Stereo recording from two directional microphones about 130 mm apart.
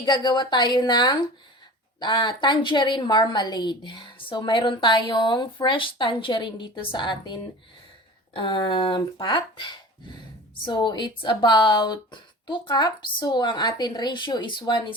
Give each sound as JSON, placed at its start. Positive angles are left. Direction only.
{"t": 0.0, "sound": "a woman's voice", "side_deg": 35}
{"t": 8.4, "sound": "a woman's voice", "side_deg": 35}